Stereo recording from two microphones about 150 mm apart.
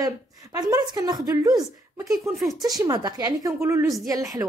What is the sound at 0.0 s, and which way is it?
A woman's voice, 25° right (ahead or behind).